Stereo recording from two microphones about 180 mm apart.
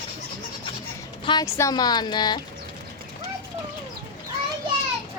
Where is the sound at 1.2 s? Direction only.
25° left (ahead or behind).